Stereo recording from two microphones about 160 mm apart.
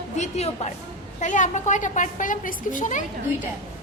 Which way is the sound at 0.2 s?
45° left (ahead or behind).